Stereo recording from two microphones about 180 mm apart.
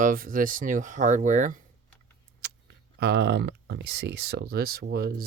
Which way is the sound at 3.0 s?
70° right (ahead or behind).